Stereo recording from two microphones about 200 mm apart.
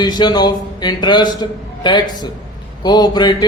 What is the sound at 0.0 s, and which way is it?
Speech, 20° left (ahead or behind).